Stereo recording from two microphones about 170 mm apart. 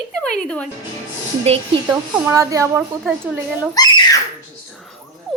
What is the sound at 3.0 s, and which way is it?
Speech, 5° right (ahead or behind).